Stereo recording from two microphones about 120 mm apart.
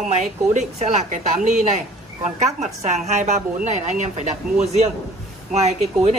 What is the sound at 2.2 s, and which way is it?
A woman's voice, 75° right (ahead or behind).